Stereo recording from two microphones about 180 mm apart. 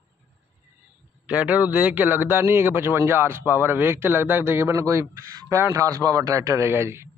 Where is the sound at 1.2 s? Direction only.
5° right (ahead or behind).